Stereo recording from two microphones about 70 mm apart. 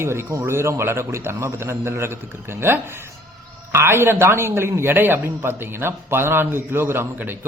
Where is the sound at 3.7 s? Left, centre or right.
Right.